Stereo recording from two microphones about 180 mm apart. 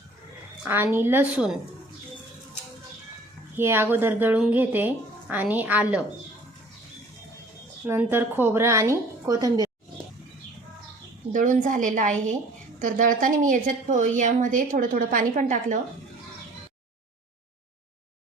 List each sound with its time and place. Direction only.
0.6 s speech: 10° right (ahead or behind)
3.5 s speech: 15° right (ahead or behind)
7.9 s speech: 10° right (ahead or behind)
11.3 s a woman's voice: 45° right (ahead or behind)